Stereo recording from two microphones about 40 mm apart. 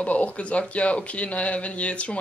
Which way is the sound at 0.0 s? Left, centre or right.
Left.